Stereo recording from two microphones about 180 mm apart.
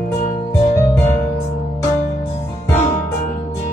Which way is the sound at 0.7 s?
15° left (ahead or behind).